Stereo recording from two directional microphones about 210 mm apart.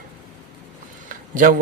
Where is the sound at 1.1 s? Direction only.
40° right (ahead or behind).